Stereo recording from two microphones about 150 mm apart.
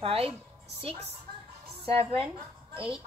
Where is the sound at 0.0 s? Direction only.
40° right (ahead or behind).